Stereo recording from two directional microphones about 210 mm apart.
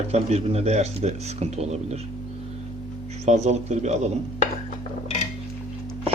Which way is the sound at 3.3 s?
30° right (ahead or behind).